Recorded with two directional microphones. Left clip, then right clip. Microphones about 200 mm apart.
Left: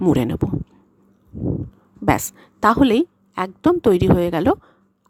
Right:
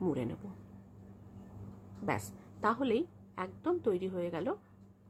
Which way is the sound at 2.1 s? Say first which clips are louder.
Left 17 dB; 55° left (ahead or behind).